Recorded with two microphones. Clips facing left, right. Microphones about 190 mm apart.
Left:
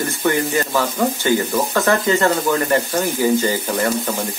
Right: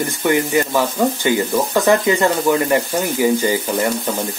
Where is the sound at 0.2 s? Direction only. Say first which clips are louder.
Right 3 dB; 15° right (ahead or behind).